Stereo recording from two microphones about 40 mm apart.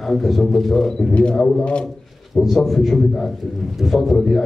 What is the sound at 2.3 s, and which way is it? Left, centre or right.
A man's voice, centre.